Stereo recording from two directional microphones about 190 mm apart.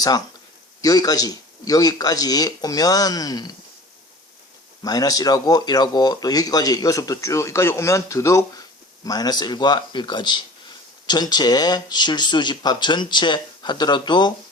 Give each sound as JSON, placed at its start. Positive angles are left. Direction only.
{"t": 0.8, "sound": "speech", "side_deg": 20}
{"t": 4.8, "sound": "speech", "side_deg": 20}